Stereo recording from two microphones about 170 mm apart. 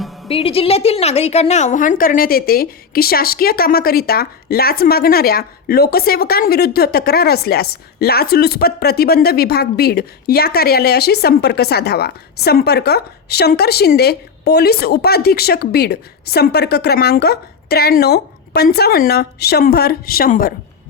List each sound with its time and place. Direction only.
0.3 s a woman's voice: 35° left (ahead or behind); by 20.5 s 60° left (ahead or behind)